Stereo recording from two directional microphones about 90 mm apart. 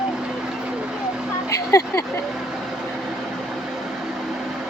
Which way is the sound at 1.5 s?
35° left (ahead or behind).